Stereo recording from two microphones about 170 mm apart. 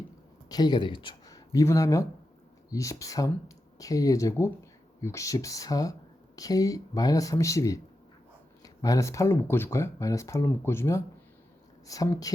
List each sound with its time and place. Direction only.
0.4 s speech: 25° left (ahead or behind)